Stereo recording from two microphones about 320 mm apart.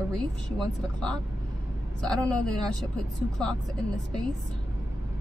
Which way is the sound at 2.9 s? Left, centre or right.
Centre.